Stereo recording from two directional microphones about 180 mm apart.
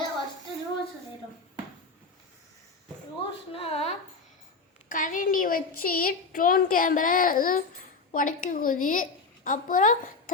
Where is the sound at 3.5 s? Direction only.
35° left (ahead or behind).